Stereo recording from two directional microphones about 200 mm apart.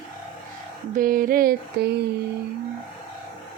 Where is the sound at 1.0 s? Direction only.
45° right (ahead or behind).